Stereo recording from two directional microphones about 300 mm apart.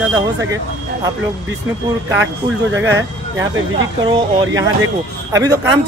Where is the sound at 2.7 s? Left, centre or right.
Right.